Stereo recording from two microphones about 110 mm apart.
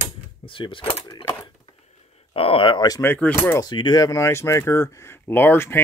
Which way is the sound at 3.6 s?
40° left (ahead or behind).